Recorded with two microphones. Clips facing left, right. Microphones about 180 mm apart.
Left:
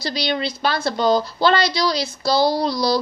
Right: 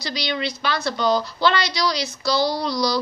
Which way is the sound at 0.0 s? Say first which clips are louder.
Left 3 dB; 30° left (ahead or behind).